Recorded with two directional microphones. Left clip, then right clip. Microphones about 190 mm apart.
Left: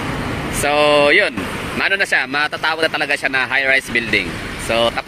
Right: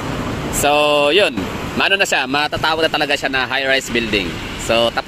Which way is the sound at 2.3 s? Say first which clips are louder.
Right 1 dB; 20° right (ahead or behind).